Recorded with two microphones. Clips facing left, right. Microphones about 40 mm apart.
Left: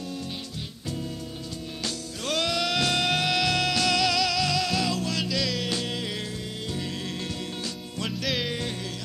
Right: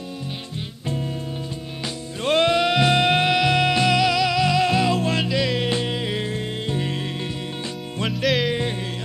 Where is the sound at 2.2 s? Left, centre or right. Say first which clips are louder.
Right 9 dB; right.